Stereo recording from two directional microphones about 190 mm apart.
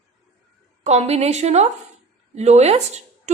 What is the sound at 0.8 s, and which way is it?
A woman's voice, 35° right (ahead or behind).